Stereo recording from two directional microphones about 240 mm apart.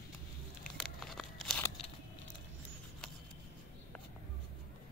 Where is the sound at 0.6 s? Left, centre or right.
Centre.